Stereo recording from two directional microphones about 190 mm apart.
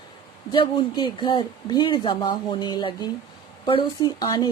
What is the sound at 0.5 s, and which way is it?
Speech, 25° left (ahead or behind).